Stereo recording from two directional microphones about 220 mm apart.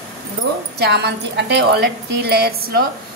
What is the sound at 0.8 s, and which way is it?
A woman's voice, 50° right (ahead or behind).